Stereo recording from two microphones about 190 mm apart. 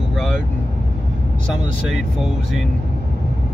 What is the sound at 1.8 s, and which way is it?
Speech, centre (ahead or behind).